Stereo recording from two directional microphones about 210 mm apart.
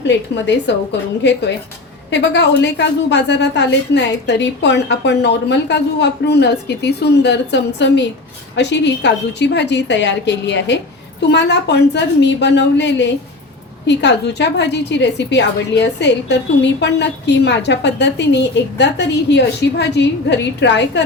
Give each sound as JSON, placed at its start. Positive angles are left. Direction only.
{"t": 0.1, "sound": "a woman's voice", "side_deg": 55}